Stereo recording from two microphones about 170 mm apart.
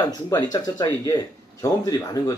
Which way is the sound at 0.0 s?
25° left (ahead or behind).